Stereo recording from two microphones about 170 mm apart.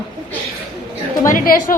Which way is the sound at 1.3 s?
55° left (ahead or behind).